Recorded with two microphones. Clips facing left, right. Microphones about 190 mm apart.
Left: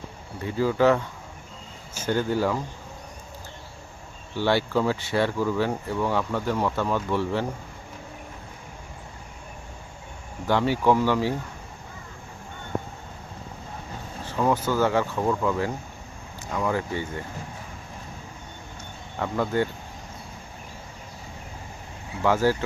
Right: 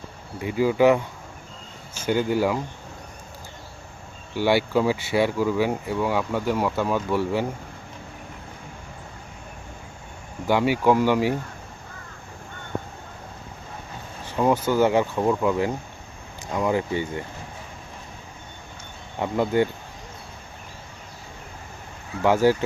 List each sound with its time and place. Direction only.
0.3 s speech: 15° right (ahead or behind)
2.0 s speech: 15° right (ahead or behind)
4.4 s speech: 10° right (ahead or behind)
10.4 s speech: 10° right (ahead or behind)
14.3 s speech: 15° right (ahead or behind)
19.2 s speech: 15° right (ahead or behind)
22.2 s speech: 15° right (ahead or behind)